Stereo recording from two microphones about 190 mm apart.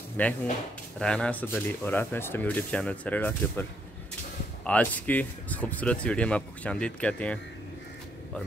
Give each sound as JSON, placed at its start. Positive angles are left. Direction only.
{"t": 0.2, "sound": "speech", "side_deg": 10}
{"t": 4.6, "sound": "speech", "side_deg": 10}